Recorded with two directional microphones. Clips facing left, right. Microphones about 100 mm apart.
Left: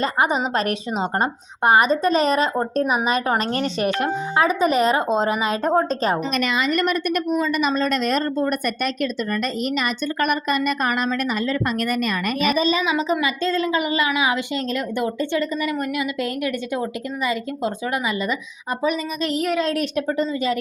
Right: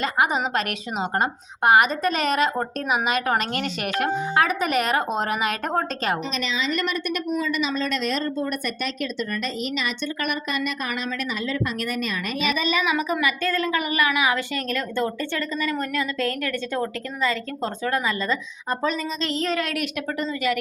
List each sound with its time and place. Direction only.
0.0 s a woman's voice: 30° left (ahead or behind)
5.9 s a woman's voice: 35° left (ahead or behind)
6.3 s a woman's voice: 55° left (ahead or behind)
12.5 s a woman's voice: 35° left (ahead or behind); by 19.6 s 10° left (ahead or behind)
19.6 s a woman's voice: 30° left (ahead or behind)